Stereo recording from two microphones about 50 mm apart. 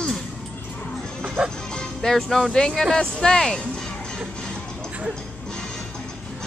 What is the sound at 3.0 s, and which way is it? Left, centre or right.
Music, centre.